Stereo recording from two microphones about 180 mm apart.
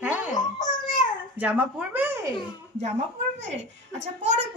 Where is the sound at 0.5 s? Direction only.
45° left (ahead or behind).